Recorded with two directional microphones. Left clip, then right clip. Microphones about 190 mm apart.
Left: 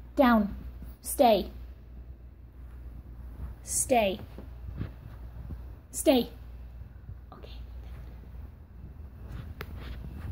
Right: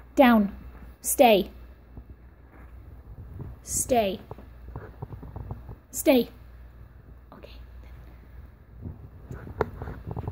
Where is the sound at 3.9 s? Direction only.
40° right (ahead or behind).